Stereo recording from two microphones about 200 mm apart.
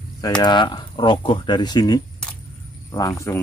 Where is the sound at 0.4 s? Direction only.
20° left (ahead or behind).